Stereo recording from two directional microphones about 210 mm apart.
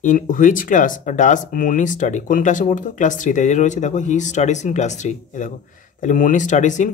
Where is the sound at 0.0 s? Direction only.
40° left (ahead or behind).